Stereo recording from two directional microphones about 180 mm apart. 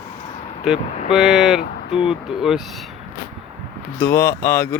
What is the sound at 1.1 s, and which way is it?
Speech, centre (ahead or behind).